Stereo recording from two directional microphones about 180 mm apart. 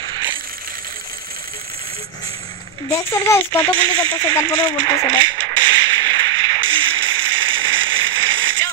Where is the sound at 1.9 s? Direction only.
35° right (ahead or behind).